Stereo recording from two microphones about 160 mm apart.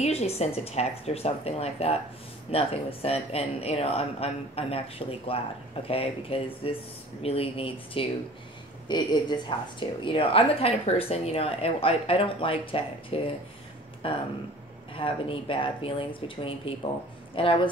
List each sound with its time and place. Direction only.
0.0 s speech: 40° left (ahead or behind)